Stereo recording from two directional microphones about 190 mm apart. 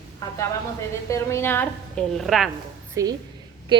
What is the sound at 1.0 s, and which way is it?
A woman's voice, 15° left (ahead or behind).